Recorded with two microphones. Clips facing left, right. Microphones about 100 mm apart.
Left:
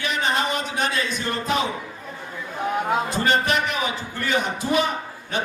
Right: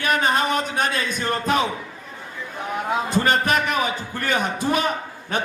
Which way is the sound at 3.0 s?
50° right (ahead or behind).